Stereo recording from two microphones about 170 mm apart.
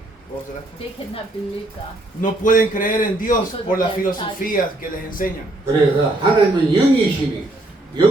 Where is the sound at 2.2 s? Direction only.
50° left (ahead or behind).